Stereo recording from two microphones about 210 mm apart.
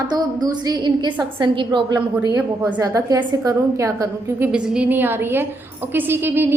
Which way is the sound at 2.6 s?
10° right (ahead or behind).